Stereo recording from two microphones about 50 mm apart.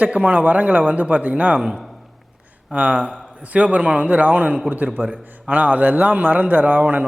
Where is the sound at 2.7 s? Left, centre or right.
Right.